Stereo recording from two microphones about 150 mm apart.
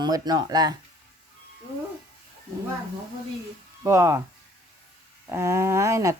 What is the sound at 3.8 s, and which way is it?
Speech, 20° right (ahead or behind).